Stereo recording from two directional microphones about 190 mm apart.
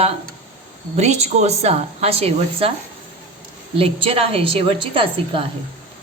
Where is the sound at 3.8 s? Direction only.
30° right (ahead or behind).